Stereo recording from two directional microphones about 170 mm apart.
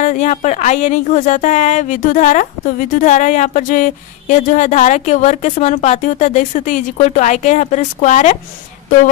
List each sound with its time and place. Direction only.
0.0 s speech: 45° left (ahead or behind)